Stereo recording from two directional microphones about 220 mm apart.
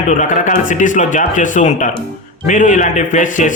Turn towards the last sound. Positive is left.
turn(degrees=35)  # may be behind; listen again after turning